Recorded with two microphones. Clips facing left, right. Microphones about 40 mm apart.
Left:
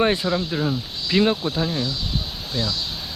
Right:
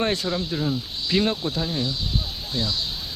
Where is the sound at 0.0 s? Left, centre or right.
Centre.